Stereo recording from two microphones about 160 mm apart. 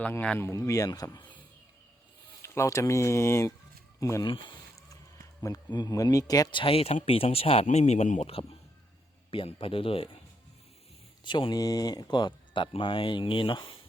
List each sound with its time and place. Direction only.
0.0 s speech: 10° left (ahead or behind); by 1.3 s 25° left (ahead or behind)
2.4 s speech: 20° left (ahead or behind)
4.3 s a sound: 30° left (ahead or behind)
5.4 s speech: 25° left (ahead or behind); by 8.3 s 50° left (ahead or behind)
8.3 s speech: 35° left (ahead or behind)
11.2 s speech: 30° left (ahead or behind)